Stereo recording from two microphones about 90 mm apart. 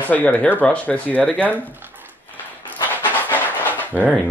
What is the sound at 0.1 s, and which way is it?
Speech, 15° left (ahead or behind).